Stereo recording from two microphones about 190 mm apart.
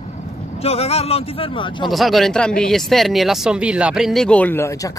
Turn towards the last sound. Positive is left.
turn(degrees=15)  # may be behind; listen again after turning